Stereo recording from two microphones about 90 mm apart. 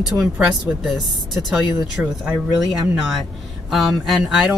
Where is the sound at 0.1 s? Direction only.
5° right (ahead or behind).